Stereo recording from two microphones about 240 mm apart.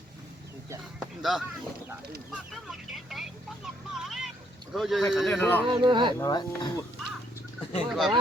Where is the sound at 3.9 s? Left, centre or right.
Centre.